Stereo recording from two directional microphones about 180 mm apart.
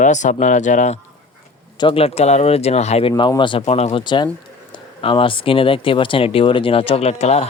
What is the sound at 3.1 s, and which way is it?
Speech, 25° left (ahead or behind).